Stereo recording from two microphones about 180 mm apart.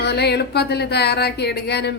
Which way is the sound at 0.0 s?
65° left (ahead or behind).